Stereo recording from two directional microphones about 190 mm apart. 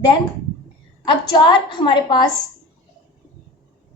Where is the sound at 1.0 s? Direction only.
20° left (ahead or behind).